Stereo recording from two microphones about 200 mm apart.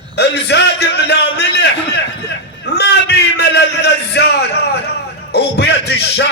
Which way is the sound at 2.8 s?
55° left (ahead or behind).